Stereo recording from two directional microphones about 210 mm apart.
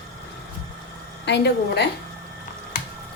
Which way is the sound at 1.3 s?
55° left (ahead or behind).